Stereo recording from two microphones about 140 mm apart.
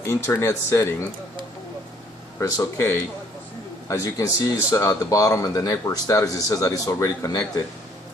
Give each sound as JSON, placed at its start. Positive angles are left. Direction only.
{"t": 0.0, "sound": "speech", "side_deg": 20}
{"t": 2.4, "sound": "speech", "side_deg": 20}